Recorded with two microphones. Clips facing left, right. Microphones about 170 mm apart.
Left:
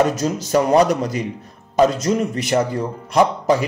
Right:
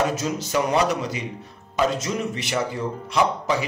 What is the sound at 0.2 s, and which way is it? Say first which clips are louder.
A man's voice: left 6 dB; 45° left (ahead or behind).